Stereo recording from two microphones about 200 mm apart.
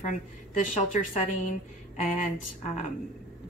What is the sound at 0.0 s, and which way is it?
A woman's voice, 40° left (ahead or behind).